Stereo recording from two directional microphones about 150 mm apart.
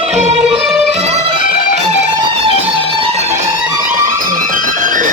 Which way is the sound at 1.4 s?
70° left (ahead or behind).